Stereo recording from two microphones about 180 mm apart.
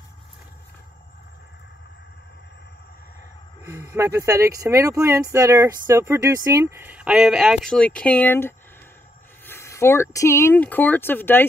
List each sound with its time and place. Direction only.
3.6 s speech: 15° right (ahead or behind); by 11.4 s 10° left (ahead or behind)